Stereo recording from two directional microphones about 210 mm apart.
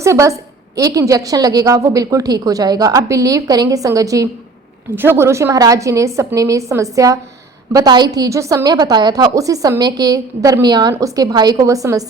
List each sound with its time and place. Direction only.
0.0 s a woman's voice: 15° right (ahead or behind)